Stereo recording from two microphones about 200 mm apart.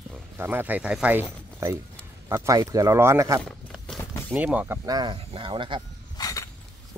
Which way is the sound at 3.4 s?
Centre (ahead or behind).